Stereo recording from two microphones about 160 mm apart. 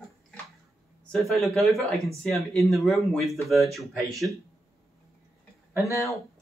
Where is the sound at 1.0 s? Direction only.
Centre (ahead or behind).